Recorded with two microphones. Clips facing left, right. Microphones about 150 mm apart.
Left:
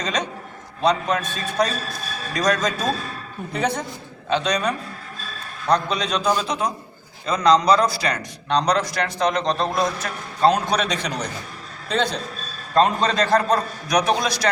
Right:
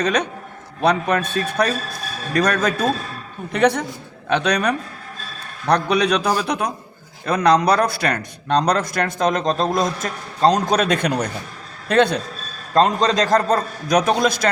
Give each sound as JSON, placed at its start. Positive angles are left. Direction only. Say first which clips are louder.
{"t": 0.0, "sound": "a man's voice", "louder": "right 5 dB", "side_deg": -60}
{"t": 12.7, "sound": "a man's voice", "louder": "right 2 dB", "side_deg": -35}